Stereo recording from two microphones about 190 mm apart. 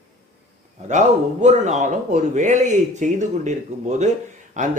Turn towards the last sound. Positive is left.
turn(degrees=-40)  # may be behind; listen again after turning